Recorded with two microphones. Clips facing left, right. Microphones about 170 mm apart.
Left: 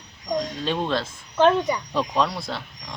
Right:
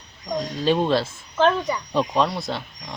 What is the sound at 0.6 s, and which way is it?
Speech, 5° right (ahead or behind).